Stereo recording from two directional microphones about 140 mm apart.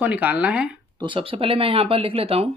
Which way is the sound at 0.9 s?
35° right (ahead or behind).